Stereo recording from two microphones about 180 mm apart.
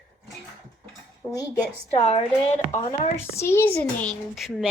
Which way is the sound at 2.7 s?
40° left (ahead or behind).